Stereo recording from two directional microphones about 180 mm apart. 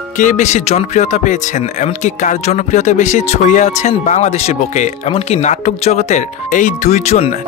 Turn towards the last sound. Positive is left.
turn(degrees=35)  # may be behind; listen again after turning